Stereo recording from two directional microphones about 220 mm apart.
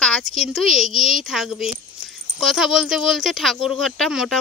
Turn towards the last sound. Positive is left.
turn(degrees=0)  # may be behind; listen again after turning